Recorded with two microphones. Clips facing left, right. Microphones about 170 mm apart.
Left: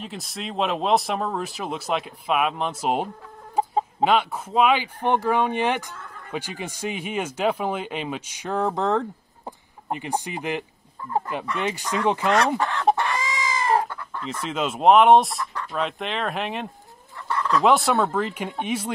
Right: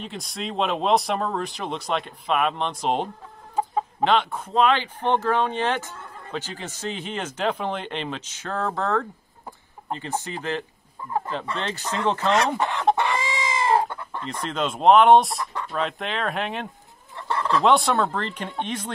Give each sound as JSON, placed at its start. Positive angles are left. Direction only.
{"t": 0.0, "sound": "speech", "side_deg": 0}
{"t": 12.5, "sound": "speech", "side_deg": -20}
{"t": 12.9, "sound": "chicken", "side_deg": -20}
{"t": 14.4, "sound": "speech", "side_deg": 5}
{"t": 17.3, "sound": "speech", "side_deg": -30}
{"t": 17.6, "sound": "speech", "side_deg": 0}